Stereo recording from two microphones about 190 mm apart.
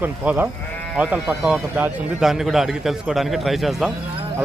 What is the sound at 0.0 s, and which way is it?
Speech, 10° right (ahead or behind).